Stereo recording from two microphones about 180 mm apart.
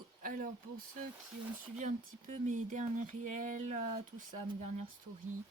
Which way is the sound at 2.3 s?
40° right (ahead or behind).